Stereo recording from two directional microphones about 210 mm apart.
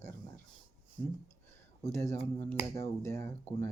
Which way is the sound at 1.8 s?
15° left (ahead or behind).